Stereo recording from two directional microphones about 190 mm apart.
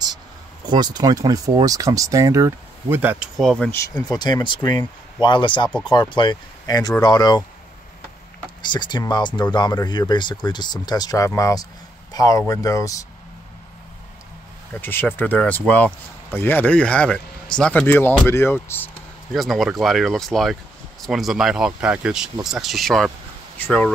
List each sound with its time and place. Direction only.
0.7 s speech: 20° right (ahead or behind); by 3.8 s 5° left (ahead or behind)
3.9 s speech: 20° left (ahead or behind)
8.6 s speech: 25° left (ahead or behind)
14.8 s speech: 10° left (ahead or behind)
19.3 s speech: centre (ahead or behind)